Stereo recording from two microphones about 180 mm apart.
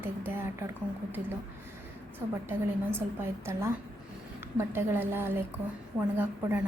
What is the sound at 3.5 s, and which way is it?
A woman's voice, 15° right (ahead or behind).